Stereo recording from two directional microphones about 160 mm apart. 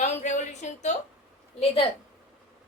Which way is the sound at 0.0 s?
45° left (ahead or behind).